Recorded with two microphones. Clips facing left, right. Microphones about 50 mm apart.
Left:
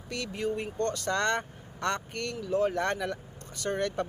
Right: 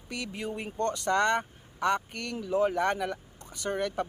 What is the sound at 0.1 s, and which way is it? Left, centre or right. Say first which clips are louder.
Speech: left 3 dB; centre.